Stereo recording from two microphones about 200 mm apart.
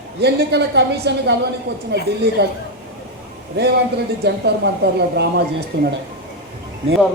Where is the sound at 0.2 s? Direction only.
55° right (ahead or behind).